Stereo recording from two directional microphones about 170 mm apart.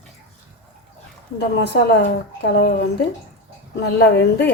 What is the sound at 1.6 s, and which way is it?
A woman's voice, 80° left.